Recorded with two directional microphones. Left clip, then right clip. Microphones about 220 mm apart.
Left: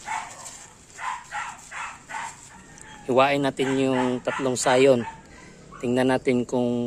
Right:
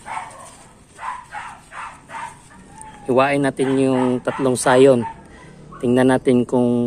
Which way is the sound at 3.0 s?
Centre (ahead or behind).